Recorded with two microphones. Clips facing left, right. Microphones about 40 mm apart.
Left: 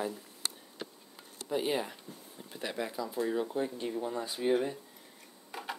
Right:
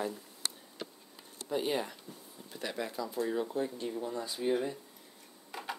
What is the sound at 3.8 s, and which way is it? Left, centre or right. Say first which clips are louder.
Speech: left 2 dB; left.